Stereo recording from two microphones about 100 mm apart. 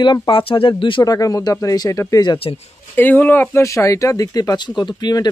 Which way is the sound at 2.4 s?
50° left (ahead or behind).